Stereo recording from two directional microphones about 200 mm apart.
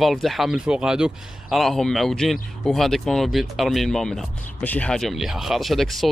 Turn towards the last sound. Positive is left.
turn(degrees=0)  # may be behind; listen again after turning